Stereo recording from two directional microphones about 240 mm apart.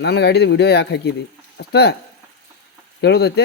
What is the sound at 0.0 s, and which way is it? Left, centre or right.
Speech, left.